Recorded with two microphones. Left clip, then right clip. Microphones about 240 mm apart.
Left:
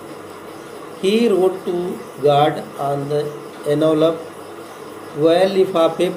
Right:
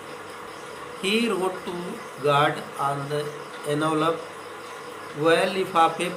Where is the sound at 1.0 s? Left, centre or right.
Centre.